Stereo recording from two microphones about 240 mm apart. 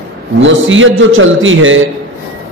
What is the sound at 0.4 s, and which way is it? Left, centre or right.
A man's voice, right.